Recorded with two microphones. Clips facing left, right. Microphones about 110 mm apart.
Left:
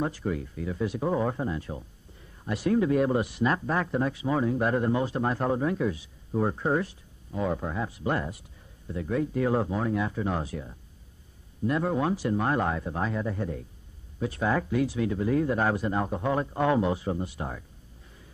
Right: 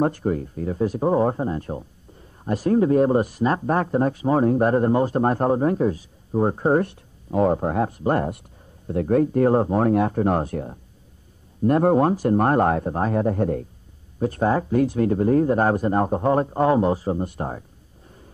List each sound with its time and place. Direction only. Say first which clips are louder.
0.0 s speech: right 8 dB; 45° right (ahead or behind)
6.8 s speech: right 8 dB; 60° right (ahead or behind)
9.8 s speech: right 9 dB; 55° right (ahead or behind)
14.2 s speech: right 6 dB; 40° right (ahead or behind)